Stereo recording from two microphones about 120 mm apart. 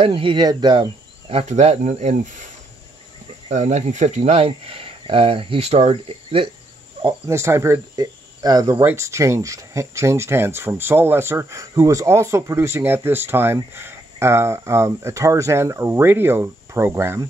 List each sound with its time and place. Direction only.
0.0 s speech: 45° right (ahead or behind)
1.3 s speech: 65° right (ahead or behind)
3.4 s speech: 70° right (ahead or behind); by 6.5 s 50° right (ahead or behind)
7.2 s speech: 25° right (ahead or behind)
7.9 s speech: 35° right (ahead or behind)
8.8 s speech: 25° right (ahead or behind)